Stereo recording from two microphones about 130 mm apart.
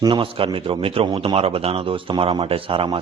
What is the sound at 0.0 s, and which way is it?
A man's voice, 40° right (ahead or behind).